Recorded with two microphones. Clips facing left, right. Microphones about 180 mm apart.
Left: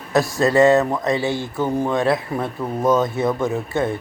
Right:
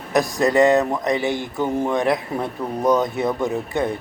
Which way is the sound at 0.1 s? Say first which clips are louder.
Left 1 dB; 20° right (ahead or behind).